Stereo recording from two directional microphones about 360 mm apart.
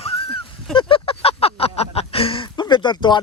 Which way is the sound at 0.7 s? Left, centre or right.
Centre.